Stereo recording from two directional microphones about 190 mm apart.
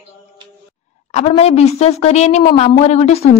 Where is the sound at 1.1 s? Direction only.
35° left (ahead or behind).